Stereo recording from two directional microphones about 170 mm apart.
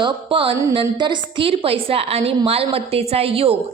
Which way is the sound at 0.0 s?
30° right (ahead or behind).